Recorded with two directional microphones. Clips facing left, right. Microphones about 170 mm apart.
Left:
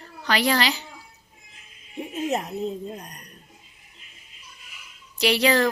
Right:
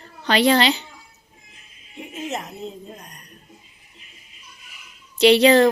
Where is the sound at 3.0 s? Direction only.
35° left (ahead or behind).